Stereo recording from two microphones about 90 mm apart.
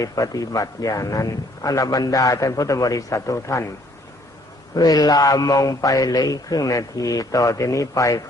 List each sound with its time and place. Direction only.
0.0 s a man's voice: 40° left (ahead or behind)
4.7 s a man's voice: 45° left (ahead or behind)